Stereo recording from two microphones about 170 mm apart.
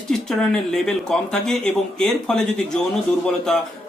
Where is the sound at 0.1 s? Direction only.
5° left (ahead or behind).